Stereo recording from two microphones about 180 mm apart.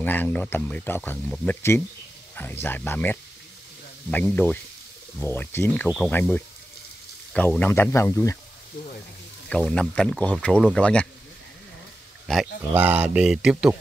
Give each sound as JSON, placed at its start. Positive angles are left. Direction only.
{"t": 0.0, "sound": "speech", "side_deg": 10}
{"t": 9.5, "sound": "speech", "side_deg": 5}
{"t": 12.3, "sound": "speech", "side_deg": -5}